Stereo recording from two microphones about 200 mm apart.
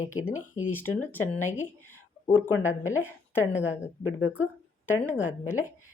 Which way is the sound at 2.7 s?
90° left.